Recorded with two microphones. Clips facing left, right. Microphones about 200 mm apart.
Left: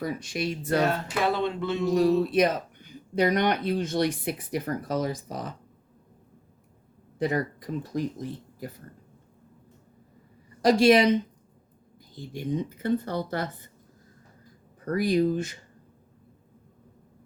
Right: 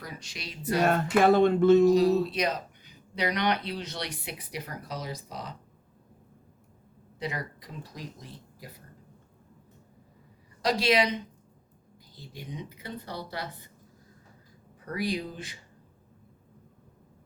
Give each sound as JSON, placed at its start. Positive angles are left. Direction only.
{"t": 0.0, "sound": "speech", "side_deg": 50}
{"t": 0.9, "sound": "speech", "side_deg": -50}
{"t": 1.9, "sound": "speech", "side_deg": 50}
{"t": 7.2, "sound": "speech", "side_deg": 50}
{"t": 10.6, "sound": "speech", "side_deg": 50}
{"t": 12.1, "sound": "speech", "side_deg": 50}
{"t": 14.8, "sound": "speech", "side_deg": 45}